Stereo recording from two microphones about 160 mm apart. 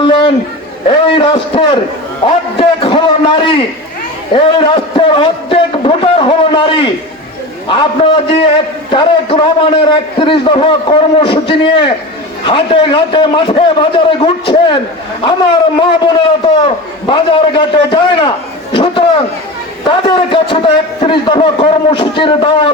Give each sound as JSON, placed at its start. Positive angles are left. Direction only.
{"t": 0.0, "sound": "a sound", "side_deg": 30}
{"t": 0.9, "sound": "a man's voice", "side_deg": 30}
{"t": 8.9, "sound": "a man's voice", "side_deg": 30}
{"t": 15.8, "sound": "a man's voice", "side_deg": 30}